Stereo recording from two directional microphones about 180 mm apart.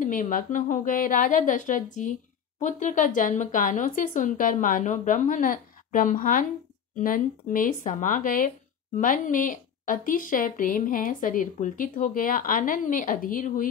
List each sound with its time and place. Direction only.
0.0 s speech: 50° left (ahead or behind)